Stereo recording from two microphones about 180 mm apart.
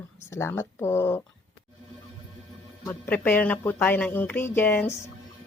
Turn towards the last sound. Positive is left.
turn(degrees=10)  # may be behind; listen again after turning